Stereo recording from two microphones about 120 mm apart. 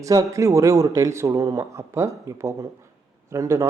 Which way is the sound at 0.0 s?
25° right (ahead or behind).